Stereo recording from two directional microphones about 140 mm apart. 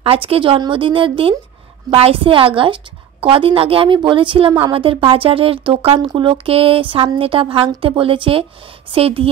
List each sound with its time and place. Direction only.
0.0 s a woman's voice: 45° right (ahead or behind)